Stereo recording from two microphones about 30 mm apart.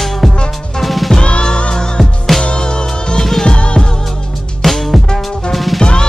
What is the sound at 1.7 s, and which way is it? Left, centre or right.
Music, left.